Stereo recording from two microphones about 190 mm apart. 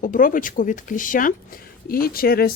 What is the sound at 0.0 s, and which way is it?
Speech, 45° left (ahead or behind).